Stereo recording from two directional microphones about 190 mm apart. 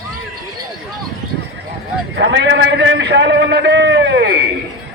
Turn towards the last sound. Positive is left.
turn(degrees=-65)  # may be behind; listen again after turning